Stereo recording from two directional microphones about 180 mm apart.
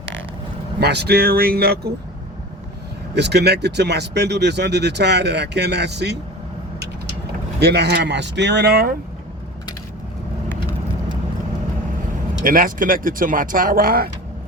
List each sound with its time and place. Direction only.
0.8 s speech: 65° right (ahead or behind)
3.2 s speech: 70° right (ahead or behind)
7.6 s speech: 65° right (ahead or behind)
12.4 s speech: 50° right (ahead or behind)